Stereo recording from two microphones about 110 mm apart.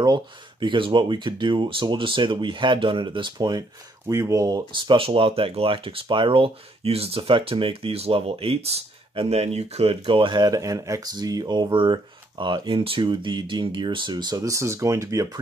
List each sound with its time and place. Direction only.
0.0 s speech: 45° right (ahead or behind)